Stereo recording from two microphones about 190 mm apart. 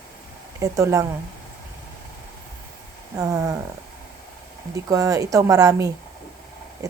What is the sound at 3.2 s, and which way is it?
Speech, 20° right (ahead or behind).